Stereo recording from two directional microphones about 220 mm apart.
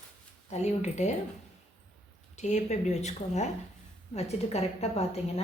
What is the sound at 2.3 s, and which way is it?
A woman's voice, 30° left (ahead or behind).